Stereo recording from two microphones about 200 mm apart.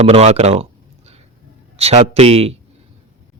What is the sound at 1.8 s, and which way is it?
Speech, 30° right (ahead or behind).